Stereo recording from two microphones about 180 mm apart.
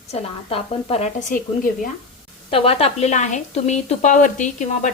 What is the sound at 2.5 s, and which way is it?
Speech, 30° left (ahead or behind).